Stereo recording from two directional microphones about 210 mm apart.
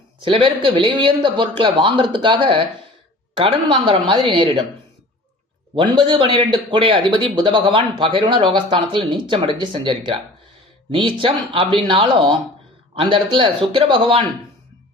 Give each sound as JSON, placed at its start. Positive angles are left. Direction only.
{"t": 0.2, "sound": "speech", "side_deg": -25}
{"t": 5.7, "sound": "a man's voice", "side_deg": -25}